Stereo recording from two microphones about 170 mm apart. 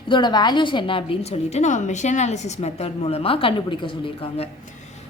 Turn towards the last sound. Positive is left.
turn(degrees=35)  # may be behind; listen again after turning